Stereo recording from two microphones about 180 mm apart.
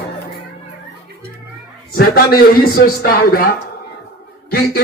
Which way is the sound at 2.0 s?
55° left (ahead or behind).